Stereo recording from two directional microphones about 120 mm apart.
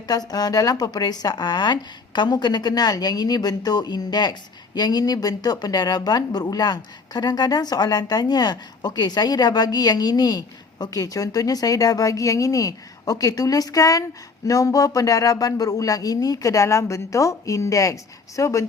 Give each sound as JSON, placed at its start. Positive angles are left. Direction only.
{"t": 0.1, "sound": "speech", "side_deg": 35}